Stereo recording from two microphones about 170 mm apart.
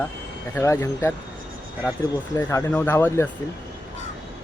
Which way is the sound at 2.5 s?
15° left (ahead or behind).